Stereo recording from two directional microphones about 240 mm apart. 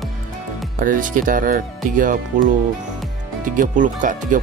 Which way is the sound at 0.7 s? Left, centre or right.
Right.